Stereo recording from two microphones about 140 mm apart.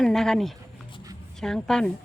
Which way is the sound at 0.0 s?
5° left (ahead or behind).